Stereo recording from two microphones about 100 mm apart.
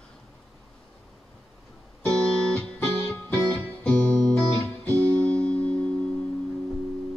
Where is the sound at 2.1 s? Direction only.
10° left (ahead or behind).